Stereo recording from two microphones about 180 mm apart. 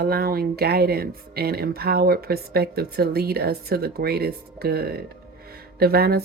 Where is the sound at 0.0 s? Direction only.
60° right (ahead or behind).